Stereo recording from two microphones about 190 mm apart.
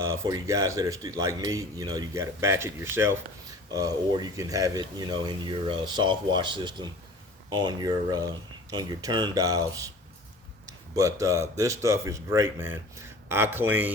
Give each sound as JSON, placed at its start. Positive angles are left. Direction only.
{"t": 0.0, "sound": "speech", "side_deg": -15}